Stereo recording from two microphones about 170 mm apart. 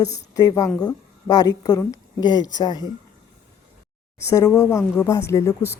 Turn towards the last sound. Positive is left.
turn(degrees=15)  # may be behind; listen again after turning